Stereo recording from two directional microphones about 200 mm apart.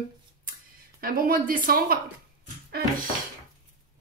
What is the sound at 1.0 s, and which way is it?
A woman's voice, 45° right (ahead or behind).